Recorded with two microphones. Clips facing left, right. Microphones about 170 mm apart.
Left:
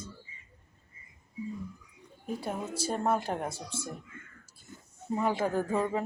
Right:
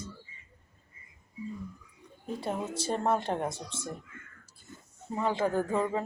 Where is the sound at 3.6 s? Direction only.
25° right (ahead or behind).